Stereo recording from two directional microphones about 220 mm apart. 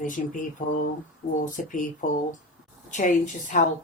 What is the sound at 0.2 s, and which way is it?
Speech, 40° left (ahead or behind).